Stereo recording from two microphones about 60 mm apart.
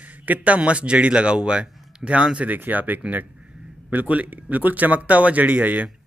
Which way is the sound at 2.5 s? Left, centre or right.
Right.